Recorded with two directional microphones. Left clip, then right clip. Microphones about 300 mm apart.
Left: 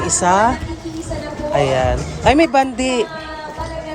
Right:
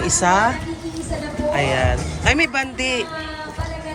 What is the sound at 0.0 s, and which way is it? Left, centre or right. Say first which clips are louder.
Speech: left 2 dB; centre.